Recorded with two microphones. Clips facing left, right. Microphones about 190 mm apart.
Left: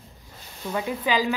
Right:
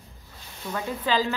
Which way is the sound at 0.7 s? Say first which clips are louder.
Left 1 dB; 15° left (ahead or behind).